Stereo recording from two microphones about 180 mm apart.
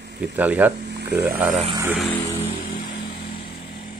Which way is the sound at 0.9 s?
65° right (ahead or behind).